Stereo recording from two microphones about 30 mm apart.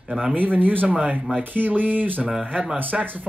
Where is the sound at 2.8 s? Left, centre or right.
Right.